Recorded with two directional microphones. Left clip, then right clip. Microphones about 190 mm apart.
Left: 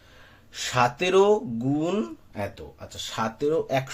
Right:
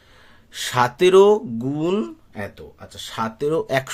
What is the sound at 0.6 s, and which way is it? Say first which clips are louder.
Speech: right 5 dB; 45° right (ahead or behind).